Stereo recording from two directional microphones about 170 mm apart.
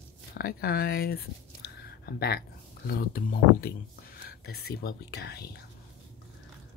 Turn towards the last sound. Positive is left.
turn(degrees=70)  # may be behind; listen again after turning